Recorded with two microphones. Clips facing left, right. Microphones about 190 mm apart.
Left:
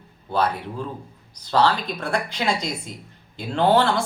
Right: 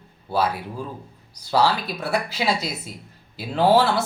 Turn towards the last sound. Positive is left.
turn(degrees=-5)  # may be behind; listen again after turning